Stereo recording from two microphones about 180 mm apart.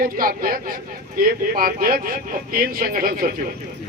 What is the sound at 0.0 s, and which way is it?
Speech, 55° right (ahead or behind).